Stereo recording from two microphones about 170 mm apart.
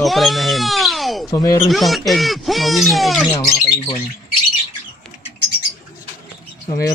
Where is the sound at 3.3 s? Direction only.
35° left (ahead or behind).